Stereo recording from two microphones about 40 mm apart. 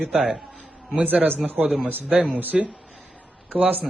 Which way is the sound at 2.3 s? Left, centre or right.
Right.